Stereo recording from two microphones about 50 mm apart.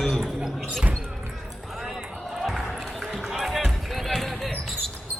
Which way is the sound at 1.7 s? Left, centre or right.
Centre.